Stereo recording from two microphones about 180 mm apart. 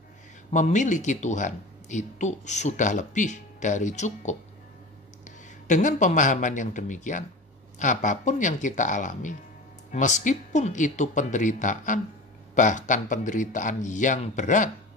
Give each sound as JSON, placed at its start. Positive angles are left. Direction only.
{"t": 0.5, "sound": "a man's voice", "side_deg": 40}